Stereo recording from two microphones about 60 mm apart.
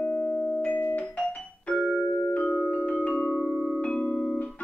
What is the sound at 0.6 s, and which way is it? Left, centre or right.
Music, left.